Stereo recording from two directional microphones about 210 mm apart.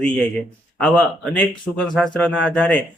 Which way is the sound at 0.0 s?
5° left (ahead or behind).